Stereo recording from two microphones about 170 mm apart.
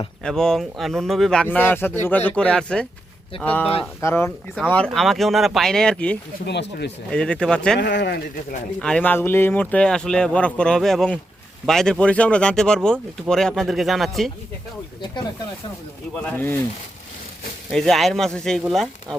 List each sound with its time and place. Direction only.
0.3 s speech: 5° left (ahead or behind)
4.7 s speech: 5° left (ahead or behind)
6.4 s speech: 80° left
7.1 s speech: 5° left (ahead or behind)
7.8 s speech: 80° left
8.8 s speech: 5° left (ahead or behind)
16.2 s speech: 10° left (ahead or behind)
17.7 s speech: centre (ahead or behind)